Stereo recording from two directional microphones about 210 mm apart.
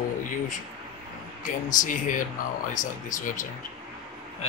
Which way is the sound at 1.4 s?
35° left (ahead or behind).